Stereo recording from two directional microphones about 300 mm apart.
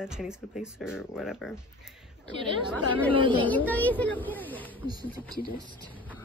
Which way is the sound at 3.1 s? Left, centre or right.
Centre.